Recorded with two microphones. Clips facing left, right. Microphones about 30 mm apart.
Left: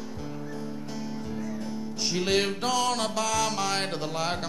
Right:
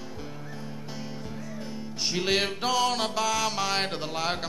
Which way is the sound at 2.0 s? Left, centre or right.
Centre.